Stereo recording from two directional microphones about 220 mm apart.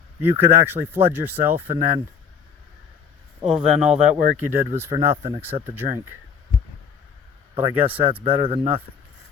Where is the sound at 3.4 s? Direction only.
5° right (ahead or behind).